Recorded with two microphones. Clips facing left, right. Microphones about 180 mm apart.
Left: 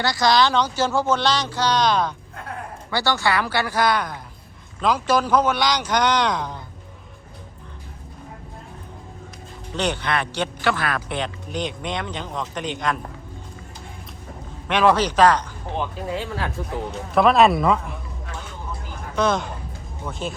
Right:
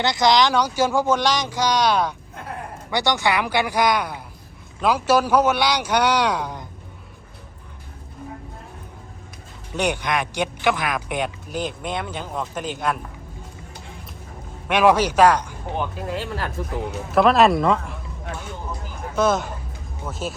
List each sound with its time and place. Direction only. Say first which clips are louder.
0.0 s speech: right 1 dB; 20° right (ahead or behind)
9.7 s speech: right 1 dB; 10° right (ahead or behind)
14.7 s speech: right 1 dB; 10° right (ahead or behind)
19.1 s speech: right 1 dB; 5° right (ahead or behind)